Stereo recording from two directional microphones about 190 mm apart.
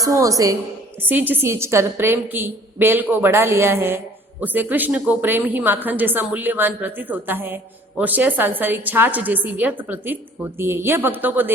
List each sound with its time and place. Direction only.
0.0 s a woman's voice: 15° right (ahead or behind)